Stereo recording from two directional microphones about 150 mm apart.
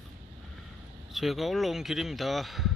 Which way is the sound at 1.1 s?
Centre (ahead or behind).